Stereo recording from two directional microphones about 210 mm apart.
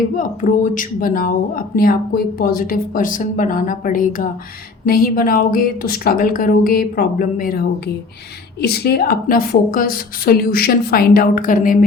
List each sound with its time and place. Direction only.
0.2 s a woman's voice: 40° left (ahead or behind)